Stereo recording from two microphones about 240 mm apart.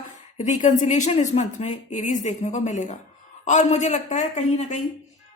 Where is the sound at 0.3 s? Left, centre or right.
Left.